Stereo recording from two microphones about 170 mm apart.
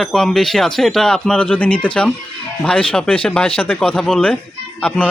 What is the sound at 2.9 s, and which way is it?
Speech, 5° left (ahead or behind).